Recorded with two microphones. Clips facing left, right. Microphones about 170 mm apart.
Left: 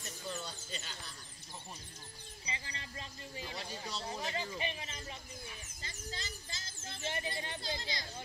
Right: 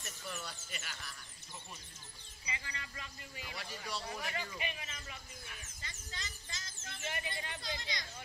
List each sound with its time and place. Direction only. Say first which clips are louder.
0.2 s a man's voice: left 3 dB; 25° left (ahead or behind)
2.4 s a man's voice: even; 30° left (ahead or behind)